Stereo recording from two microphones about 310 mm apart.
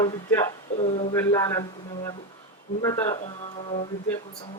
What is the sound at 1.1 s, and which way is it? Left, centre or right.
Speech, centre.